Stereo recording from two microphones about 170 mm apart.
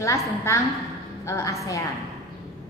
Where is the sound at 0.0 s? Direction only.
15° left (ahead or behind).